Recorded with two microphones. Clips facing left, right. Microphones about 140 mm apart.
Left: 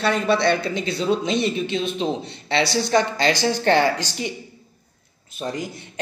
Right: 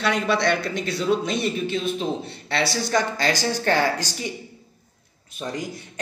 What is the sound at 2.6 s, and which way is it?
Speech, 65° left (ahead or behind).